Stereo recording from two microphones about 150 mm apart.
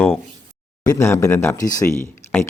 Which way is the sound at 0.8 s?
20° left (ahead or behind).